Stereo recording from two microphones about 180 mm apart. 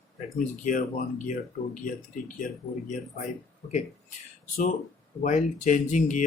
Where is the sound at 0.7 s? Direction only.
45° left (ahead or behind).